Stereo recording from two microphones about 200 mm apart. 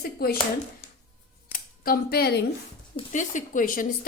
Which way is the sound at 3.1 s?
40° left (ahead or behind).